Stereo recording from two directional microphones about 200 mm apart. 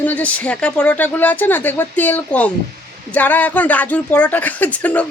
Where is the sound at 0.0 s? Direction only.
10° left (ahead or behind).